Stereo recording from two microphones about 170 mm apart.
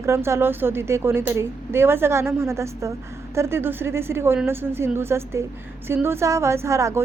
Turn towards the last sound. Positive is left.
turn(degrees=-20)  # may be behind; listen again after turning